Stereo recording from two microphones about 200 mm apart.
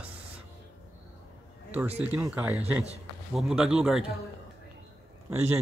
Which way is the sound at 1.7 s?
10° right (ahead or behind).